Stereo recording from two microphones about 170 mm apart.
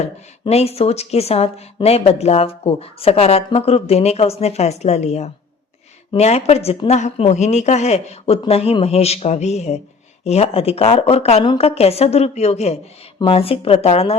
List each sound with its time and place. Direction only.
0.0 s speech: 35° left (ahead or behind)